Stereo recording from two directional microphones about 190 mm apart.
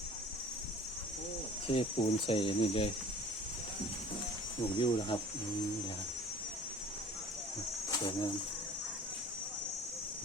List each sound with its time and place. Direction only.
1.6 s speech: 30° left (ahead or behind)
4.8 s speech: 25° left (ahead or behind)
7.9 s speech: 20° left (ahead or behind)